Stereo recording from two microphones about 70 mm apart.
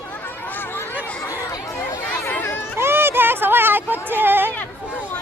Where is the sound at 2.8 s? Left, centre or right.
Right.